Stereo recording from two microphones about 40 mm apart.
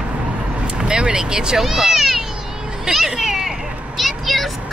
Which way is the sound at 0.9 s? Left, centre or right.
Right.